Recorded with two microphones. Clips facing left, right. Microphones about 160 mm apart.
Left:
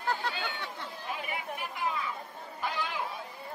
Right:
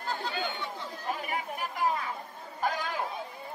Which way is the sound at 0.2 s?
70° left (ahead or behind).